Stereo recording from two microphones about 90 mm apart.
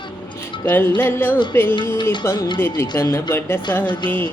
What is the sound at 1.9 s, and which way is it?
Music, 55° left (ahead or behind).